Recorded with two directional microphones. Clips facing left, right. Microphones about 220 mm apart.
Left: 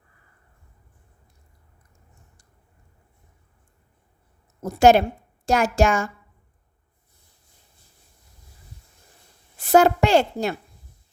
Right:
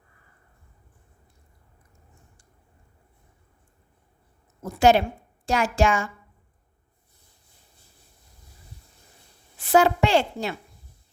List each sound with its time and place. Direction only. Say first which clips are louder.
4.6 s a woman's voice: left 3 dB; 40° left (ahead or behind)
9.6 s a woman's voice: left 3 dB; 40° left (ahead or behind)